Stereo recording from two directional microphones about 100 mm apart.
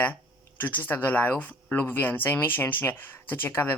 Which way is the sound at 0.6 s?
20° left (ahead or behind).